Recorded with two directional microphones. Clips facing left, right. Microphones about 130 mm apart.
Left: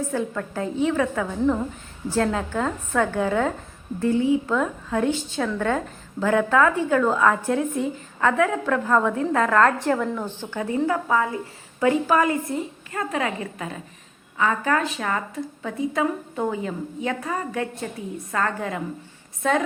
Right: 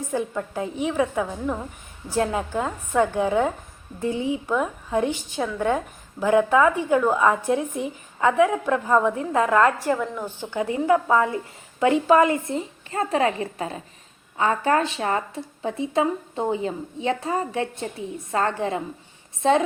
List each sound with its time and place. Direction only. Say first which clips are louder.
0.1 s speech: even; 15° right (ahead or behind)
10.5 s speech: right 3 dB; 15° right (ahead or behind)